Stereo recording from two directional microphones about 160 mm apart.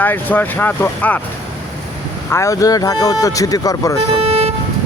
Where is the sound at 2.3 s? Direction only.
20° left (ahead or behind).